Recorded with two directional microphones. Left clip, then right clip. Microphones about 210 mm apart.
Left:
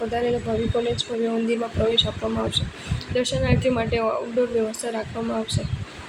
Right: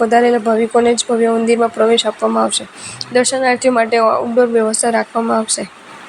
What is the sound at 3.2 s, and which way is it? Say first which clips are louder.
A woman's voice: right 10 dB; 25° right (ahead or behind).